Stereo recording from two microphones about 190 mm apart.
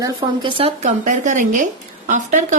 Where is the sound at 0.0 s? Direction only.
20° right (ahead or behind).